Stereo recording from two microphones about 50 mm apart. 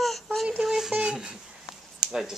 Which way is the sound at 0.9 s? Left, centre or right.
Centre.